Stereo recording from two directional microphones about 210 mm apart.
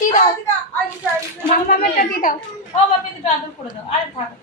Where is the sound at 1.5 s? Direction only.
40° left (ahead or behind).